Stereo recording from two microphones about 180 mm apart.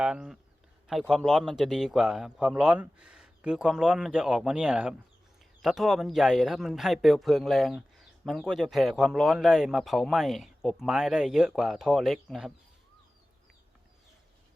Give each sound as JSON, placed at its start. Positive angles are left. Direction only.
{"t": 0.0, "sound": "a man's voice", "side_deg": -5}